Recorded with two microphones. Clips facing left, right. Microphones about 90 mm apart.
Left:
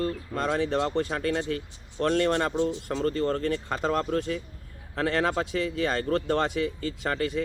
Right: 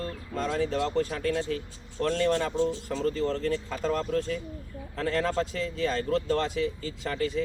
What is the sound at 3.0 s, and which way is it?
Speech, 60° left (ahead or behind).